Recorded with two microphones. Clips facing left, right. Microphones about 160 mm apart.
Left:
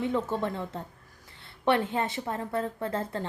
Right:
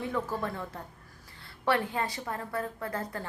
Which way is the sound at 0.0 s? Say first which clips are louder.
Left 4 dB; 20° left (ahead or behind).